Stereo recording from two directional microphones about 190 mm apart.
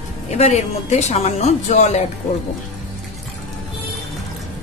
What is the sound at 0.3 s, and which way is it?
Speech, 35° left (ahead or behind).